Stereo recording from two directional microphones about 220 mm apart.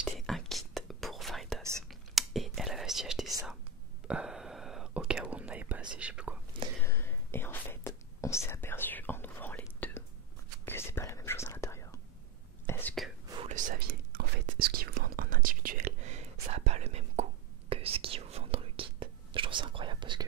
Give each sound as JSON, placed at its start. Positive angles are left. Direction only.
{"t": 0.0, "sound": "whispering", "side_deg": 0}
{"t": 1.6, "sound": "whispering", "side_deg": -15}
{"t": 1.9, "sound": "whispering", "side_deg": 0}
{"t": 6.8, "sound": "whispering", "side_deg": 10}
{"t": 13.3, "sound": "whispering", "side_deg": -25}
{"t": 13.6, "sound": "whispering", "side_deg": -40}